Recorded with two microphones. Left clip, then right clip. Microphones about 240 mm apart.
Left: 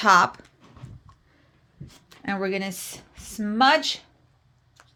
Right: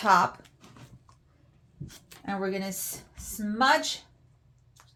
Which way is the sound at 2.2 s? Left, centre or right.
Left.